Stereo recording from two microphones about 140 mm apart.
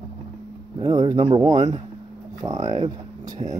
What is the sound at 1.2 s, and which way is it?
Speech, 45° right (ahead or behind).